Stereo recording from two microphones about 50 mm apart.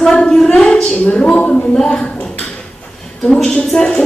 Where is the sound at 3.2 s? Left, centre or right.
Centre.